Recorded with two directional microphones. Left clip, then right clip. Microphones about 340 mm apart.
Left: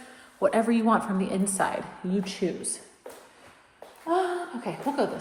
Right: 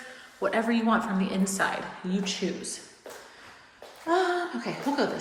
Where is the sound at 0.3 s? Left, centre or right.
Centre.